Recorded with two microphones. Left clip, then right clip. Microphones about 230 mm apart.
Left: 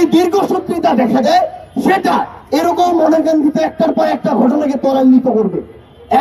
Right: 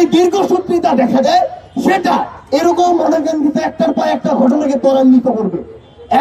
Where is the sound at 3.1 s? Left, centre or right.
Centre.